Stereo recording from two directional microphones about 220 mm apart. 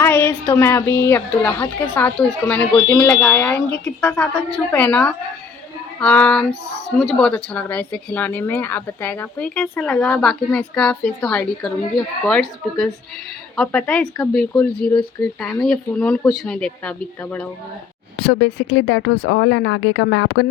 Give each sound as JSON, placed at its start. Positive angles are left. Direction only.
{"t": 0.0, "sound": "a woman's voice", "side_deg": 10}
{"t": 18.3, "sound": "speech", "side_deg": 55}